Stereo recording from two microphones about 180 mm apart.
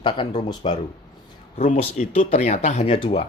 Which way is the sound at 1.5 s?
35° left (ahead or behind).